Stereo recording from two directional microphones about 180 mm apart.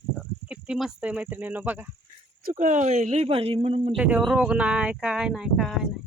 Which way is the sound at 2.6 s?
45° right (ahead or behind).